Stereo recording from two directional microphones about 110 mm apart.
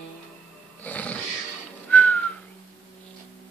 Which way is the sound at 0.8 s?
15° left (ahead or behind).